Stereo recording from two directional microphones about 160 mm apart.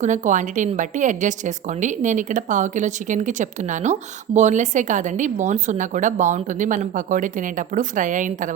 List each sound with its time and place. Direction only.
0.0 s speech: 50° right (ahead or behind)